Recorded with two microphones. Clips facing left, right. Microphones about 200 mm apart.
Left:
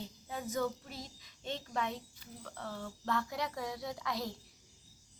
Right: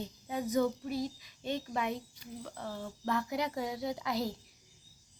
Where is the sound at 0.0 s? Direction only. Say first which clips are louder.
Right 5 dB; 15° right (ahead or behind).